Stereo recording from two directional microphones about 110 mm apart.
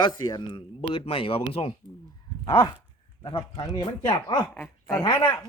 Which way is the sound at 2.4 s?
45° left (ahead or behind).